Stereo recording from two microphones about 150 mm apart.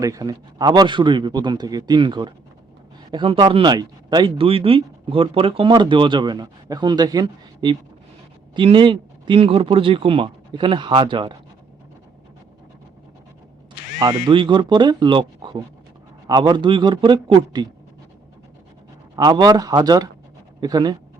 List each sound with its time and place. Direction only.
0.0 s a man's voice: 25° right (ahead or behind)
14.3 s speech: 30° right (ahead or behind)
19.1 s a man's voice: 25° right (ahead or behind)